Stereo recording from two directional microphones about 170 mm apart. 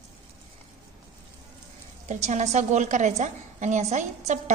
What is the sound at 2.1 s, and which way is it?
A woman's voice, 40° right (ahead or behind).